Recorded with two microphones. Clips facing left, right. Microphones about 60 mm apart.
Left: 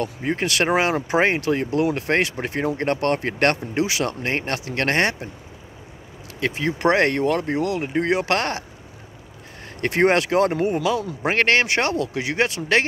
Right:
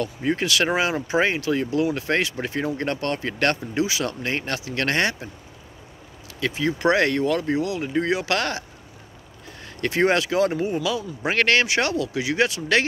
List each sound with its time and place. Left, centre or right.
0.0 s speech: left
1.0 s speech: left
4.0 s speech: left
6.4 s speech: left
9.8 s speech: left